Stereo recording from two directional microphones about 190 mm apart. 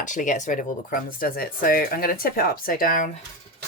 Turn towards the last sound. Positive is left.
turn(degrees=45)  # may be behind; listen again after turning